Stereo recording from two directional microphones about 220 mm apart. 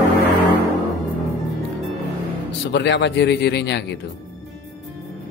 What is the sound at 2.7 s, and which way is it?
Speech, 55° left (ahead or behind).